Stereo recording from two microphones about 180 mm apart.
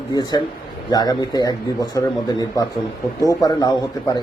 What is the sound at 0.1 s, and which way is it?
Speech, 20° left (ahead or behind).